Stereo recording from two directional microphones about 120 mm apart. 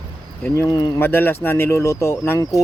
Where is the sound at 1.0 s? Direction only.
15° left (ahead or behind).